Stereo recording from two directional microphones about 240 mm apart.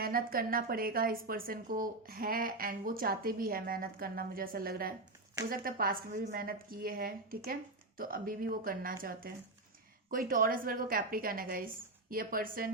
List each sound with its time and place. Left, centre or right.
0.0 s a woman's voice: right